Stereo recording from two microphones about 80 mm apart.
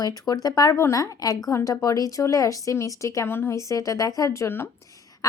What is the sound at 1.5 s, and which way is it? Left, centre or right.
Speech, left.